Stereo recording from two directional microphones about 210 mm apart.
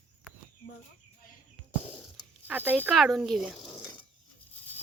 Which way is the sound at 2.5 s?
10° right (ahead or behind).